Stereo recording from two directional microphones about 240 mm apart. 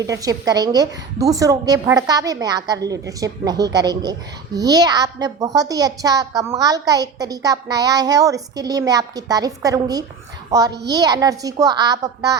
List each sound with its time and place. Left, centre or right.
0.0 s a woman's voice: centre